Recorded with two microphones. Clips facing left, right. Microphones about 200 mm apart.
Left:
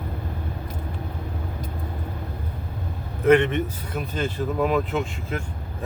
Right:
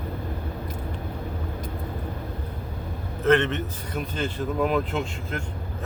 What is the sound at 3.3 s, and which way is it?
A man's voice, 10° left (ahead or behind).